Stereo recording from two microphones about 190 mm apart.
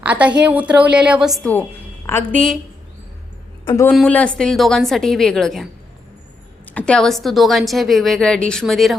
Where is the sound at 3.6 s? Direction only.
15° left (ahead or behind).